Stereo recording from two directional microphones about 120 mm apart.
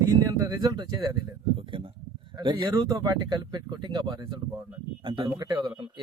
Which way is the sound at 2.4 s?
40° right (ahead or behind).